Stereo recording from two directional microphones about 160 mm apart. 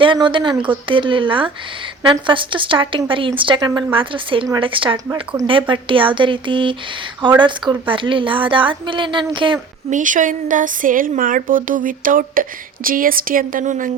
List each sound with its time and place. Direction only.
0.0 s a woman's voice: 30° right (ahead or behind)
9.9 s speech: 55° right (ahead or behind)